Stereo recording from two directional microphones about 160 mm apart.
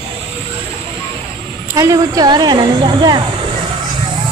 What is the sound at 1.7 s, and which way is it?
Speech, 20° right (ahead or behind).